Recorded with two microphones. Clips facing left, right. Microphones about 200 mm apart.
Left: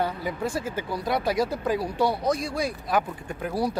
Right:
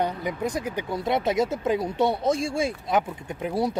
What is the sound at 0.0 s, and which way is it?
Speech, 20° right (ahead or behind).